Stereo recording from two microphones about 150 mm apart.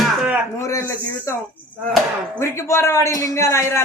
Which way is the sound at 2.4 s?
20° left (ahead or behind).